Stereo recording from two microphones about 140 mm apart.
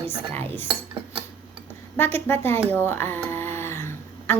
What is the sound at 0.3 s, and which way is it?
Speech, 15° left (ahead or behind).